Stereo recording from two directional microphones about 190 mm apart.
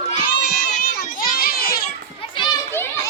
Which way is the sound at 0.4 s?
60° left (ahead or behind).